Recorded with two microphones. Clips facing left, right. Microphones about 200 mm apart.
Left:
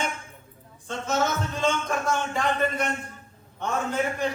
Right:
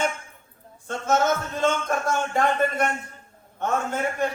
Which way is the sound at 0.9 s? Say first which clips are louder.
Right 4 dB; 50° right (ahead or behind).